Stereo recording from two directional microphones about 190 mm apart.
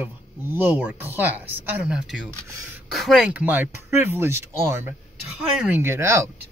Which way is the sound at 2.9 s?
Centre (ahead or behind).